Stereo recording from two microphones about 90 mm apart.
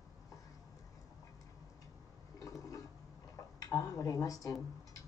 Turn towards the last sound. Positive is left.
turn(degrees=40)  # may be behind; listen again after turning